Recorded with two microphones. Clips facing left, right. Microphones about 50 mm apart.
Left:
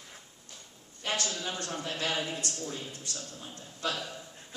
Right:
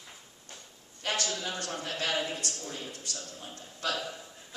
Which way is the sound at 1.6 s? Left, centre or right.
Left.